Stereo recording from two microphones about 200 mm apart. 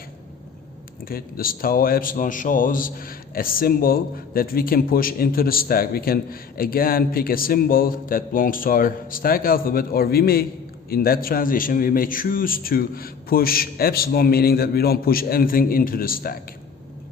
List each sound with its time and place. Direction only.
1.0 s a man's voice: 45° left (ahead or behind)